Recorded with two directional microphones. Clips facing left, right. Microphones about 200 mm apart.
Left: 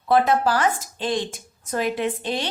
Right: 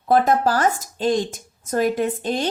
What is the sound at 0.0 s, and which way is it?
Speech, 45° right (ahead or behind).